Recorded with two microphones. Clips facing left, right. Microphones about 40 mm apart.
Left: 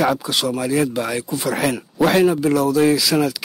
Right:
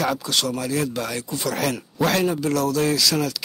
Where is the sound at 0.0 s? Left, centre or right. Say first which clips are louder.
Left 4 dB; centre.